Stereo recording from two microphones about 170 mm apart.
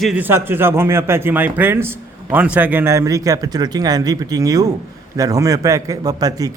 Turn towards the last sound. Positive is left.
turn(degrees=-20)  # may be behind; listen again after turning